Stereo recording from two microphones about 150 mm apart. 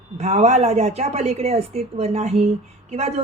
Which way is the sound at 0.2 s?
45° right (ahead or behind).